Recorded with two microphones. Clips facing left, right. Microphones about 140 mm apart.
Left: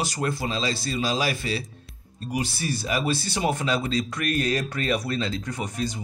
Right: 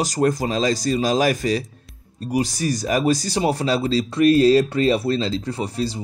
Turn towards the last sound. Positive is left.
turn(degrees=-30)  # may be behind; listen again after turning